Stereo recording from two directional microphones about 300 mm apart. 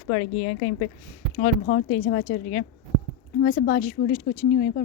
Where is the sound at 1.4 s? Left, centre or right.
Left.